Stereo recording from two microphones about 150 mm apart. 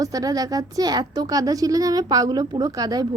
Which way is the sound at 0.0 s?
25° right (ahead or behind).